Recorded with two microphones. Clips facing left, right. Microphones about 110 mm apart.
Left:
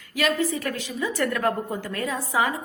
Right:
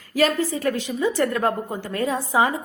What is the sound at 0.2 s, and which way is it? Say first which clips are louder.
A woman's voice: right 3 dB; 35° right (ahead or behind).